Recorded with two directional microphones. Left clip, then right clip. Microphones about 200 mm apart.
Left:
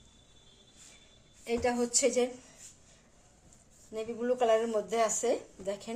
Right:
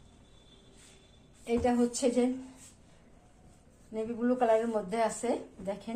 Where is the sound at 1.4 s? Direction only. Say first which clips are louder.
Right 2 dB; 35° left (ahead or behind).